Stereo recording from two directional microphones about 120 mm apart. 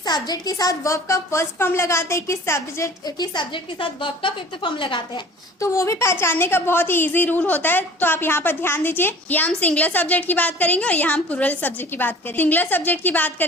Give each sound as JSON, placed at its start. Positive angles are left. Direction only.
{"t": 0.0, "sound": "a woman's voice", "side_deg": 35}
{"t": 3.2, "sound": "a woman's voice", "side_deg": 40}
{"t": 5.5, "sound": "a woman's voice", "side_deg": 25}